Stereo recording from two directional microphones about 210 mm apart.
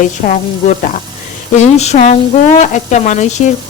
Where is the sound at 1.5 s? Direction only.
30° left (ahead or behind).